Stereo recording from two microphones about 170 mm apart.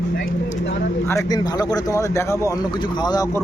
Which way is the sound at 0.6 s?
90° left.